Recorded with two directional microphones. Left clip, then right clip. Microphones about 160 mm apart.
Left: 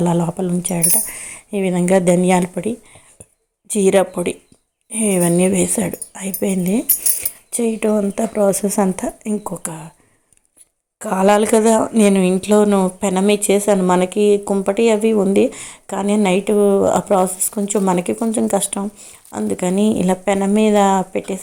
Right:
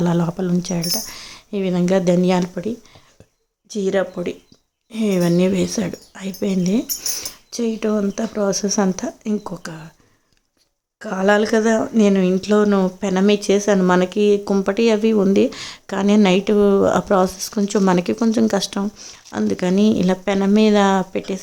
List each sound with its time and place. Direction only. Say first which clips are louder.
0.0 s speech: left 2 dB; 10° right (ahead or behind)
3.7 s speech: left 6 dB; 15° left (ahead or behind)
4.9 s speech: left 2 dB; 5° right (ahead or behind)
8.4 s speech: left 3 dB; 10° left (ahead or behind)
9.0 s speech: left 2 dB; 5° right (ahead or behind)
11.0 s speech: left 3 dB; centre (ahead or behind)
13.7 s speech: left 1 dB; 10° right (ahead or behind)